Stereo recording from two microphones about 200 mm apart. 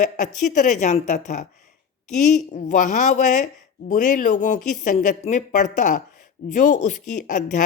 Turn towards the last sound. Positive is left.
turn(degrees=40)  # may be behind; listen again after turning